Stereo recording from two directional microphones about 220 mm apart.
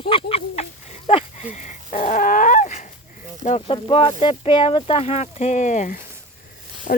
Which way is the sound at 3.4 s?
30° left (ahead or behind).